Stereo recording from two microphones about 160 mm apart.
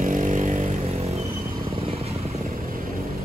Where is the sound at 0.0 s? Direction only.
55° right (ahead or behind).